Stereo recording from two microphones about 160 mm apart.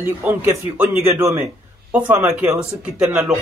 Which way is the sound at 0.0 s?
15° right (ahead or behind).